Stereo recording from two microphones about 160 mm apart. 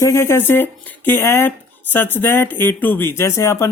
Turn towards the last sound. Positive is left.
turn(degrees=20)  # may be behind; listen again after turning